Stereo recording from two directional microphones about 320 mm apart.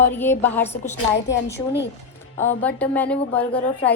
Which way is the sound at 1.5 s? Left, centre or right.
Left.